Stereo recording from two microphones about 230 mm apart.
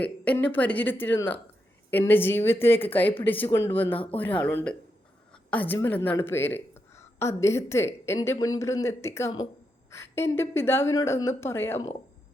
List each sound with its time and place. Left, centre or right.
0.0 s a woman's voice: centre